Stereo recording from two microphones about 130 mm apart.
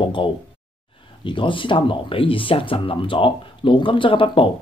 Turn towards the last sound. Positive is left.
turn(degrees=40)  # may be behind; listen again after turning